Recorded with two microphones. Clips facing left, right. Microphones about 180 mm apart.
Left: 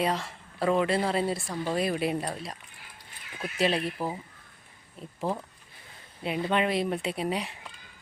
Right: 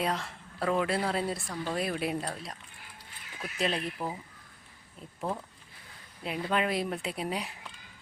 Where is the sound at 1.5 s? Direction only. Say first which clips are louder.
Left 4 dB; 20° left (ahead or behind).